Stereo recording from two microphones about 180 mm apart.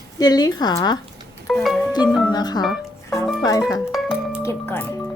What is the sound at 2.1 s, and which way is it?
Music, centre (ahead or behind).